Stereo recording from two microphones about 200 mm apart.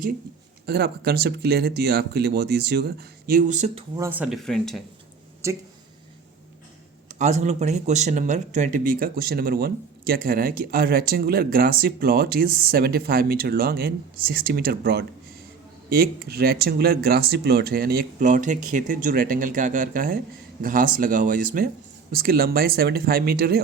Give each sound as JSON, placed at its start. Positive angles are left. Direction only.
{"t": 0.6, "sound": "speech", "side_deg": -50}
{"t": 3.9, "sound": "speech", "side_deg": -10}
{"t": 5.4, "sound": "speech", "side_deg": -15}
{"t": 7.2, "sound": "speech", "side_deg": -35}